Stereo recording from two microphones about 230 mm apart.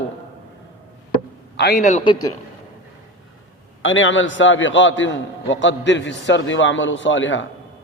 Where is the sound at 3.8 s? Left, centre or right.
Left.